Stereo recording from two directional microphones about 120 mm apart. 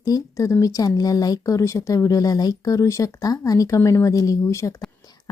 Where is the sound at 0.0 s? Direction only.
25° left (ahead or behind).